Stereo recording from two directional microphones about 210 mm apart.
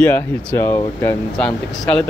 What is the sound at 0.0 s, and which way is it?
Speech, 10° left (ahead or behind).